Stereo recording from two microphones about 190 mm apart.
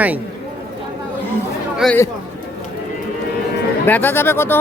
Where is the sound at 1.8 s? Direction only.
5° left (ahead or behind).